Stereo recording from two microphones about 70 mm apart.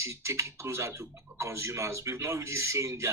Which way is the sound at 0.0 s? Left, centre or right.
Right.